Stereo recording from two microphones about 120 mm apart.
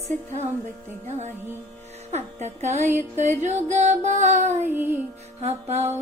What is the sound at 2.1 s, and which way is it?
Music, 70° right (ahead or behind).